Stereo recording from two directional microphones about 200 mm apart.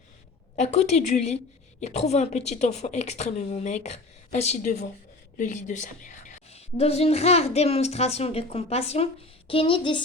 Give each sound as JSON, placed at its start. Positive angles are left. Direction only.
{"t": 0.5, "sound": "a woman's voice", "side_deg": 35}